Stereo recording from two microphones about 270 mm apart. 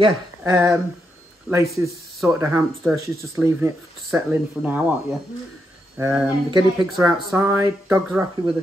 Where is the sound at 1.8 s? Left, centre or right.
Centre.